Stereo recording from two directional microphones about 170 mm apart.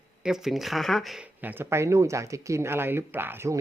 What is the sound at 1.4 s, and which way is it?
Speech, 10° right (ahead or behind).